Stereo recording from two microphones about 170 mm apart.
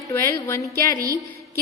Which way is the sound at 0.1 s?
20° left (ahead or behind).